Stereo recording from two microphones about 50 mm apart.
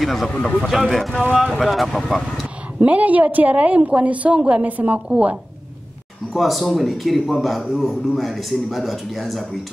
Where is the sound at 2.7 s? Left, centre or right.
Right.